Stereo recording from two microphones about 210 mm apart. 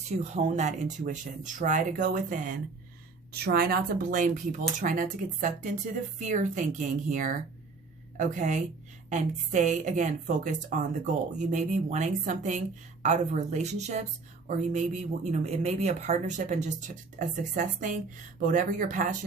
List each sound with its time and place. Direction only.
0.3 s a woman's voice: 35° right (ahead or behind)